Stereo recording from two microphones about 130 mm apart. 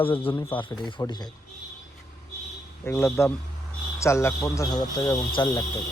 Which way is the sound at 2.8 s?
20° left (ahead or behind).